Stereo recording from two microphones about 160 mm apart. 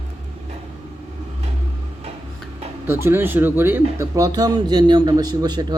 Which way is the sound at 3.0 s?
15° right (ahead or behind).